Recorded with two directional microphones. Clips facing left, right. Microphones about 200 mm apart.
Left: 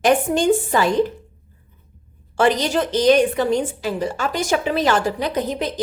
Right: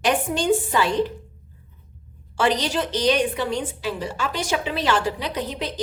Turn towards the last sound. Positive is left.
turn(degrees=45)  # may be behind; listen again after turning